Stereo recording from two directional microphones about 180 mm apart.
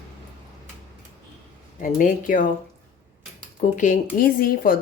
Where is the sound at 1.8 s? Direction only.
50° left (ahead or behind).